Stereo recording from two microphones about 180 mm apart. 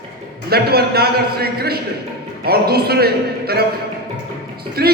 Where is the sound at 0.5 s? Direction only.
60° right (ahead or behind).